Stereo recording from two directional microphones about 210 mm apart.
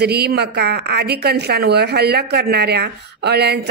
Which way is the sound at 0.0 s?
50° right (ahead or behind).